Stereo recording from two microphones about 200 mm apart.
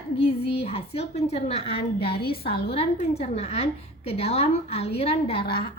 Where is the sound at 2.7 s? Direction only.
30° left (ahead or behind).